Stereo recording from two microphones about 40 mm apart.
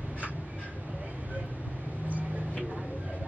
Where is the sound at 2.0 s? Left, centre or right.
Right.